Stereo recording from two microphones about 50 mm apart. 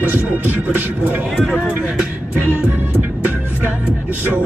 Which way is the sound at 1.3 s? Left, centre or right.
Centre.